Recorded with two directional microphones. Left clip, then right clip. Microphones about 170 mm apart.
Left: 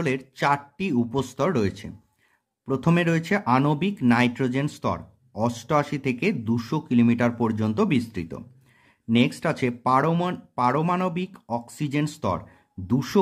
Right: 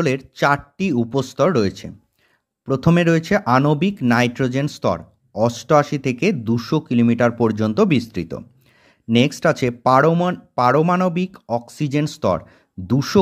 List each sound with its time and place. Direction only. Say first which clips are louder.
0.0 s speech: right 6 dB; 30° right (ahead or behind)
10.1 s speech: right 6 dB; 20° right (ahead or behind)
10.5 s speech: right 7 dB; 35° right (ahead or behind)